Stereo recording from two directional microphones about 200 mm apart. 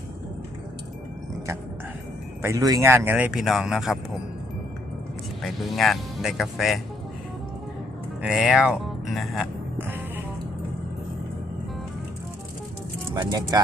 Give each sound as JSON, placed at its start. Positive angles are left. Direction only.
{"t": 2.4, "sound": "speech", "side_deg": -15}
{"t": 5.4, "sound": "speech", "side_deg": 0}
{"t": 8.2, "sound": "speech", "side_deg": -5}
{"t": 13.1, "sound": "speech", "side_deg": -20}